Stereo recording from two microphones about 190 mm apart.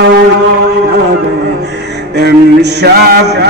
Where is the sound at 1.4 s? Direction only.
60° right (ahead or behind).